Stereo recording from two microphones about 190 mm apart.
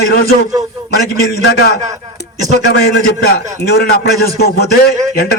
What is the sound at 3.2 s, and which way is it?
A man's voice, 55° left (ahead or behind).